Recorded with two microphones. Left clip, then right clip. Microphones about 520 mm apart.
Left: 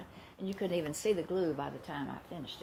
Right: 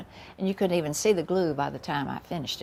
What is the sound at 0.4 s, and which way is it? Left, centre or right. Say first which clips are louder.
Speech: right 9 dB; right.